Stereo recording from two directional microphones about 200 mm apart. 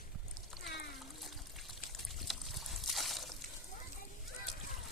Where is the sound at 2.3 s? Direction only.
Centre (ahead or behind).